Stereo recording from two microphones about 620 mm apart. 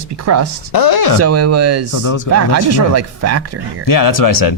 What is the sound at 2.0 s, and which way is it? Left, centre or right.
Speech, left.